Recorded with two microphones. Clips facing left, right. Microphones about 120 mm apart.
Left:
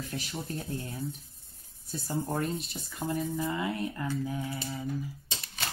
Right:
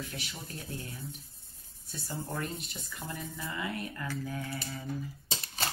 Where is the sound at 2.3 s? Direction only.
25° left (ahead or behind).